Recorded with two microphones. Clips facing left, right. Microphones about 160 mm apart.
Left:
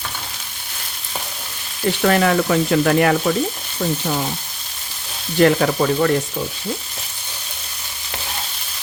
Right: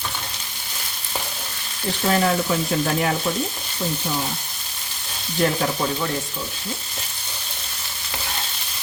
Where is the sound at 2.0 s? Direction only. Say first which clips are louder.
Left 4 dB; 75° left (ahead or behind).